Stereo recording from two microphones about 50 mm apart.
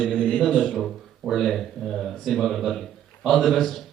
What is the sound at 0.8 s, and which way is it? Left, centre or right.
Speech, centre.